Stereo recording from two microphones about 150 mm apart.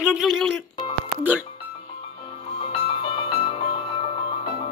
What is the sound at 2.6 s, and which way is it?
Music, 40° left (ahead or behind).